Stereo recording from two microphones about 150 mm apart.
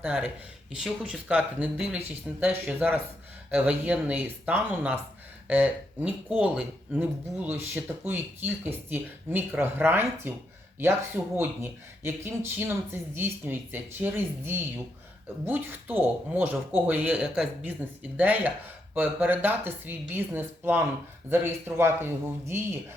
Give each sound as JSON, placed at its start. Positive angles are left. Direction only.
{"t": 0.0, "sound": "speech", "side_deg": -10}
{"t": 11.3, "sound": "speech", "side_deg": -15}